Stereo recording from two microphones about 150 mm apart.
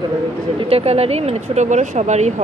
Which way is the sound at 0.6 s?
40° right (ahead or behind).